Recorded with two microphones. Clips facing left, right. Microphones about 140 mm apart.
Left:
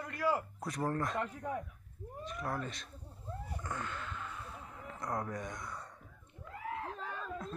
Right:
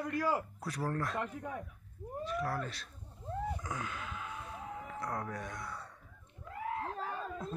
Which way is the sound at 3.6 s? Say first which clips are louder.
Even; 5° right (ahead or behind).